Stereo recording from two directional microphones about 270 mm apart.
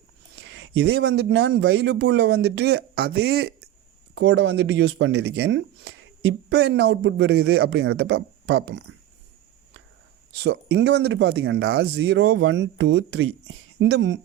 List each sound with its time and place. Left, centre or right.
0.3 s speech: right
10.3 s speech: right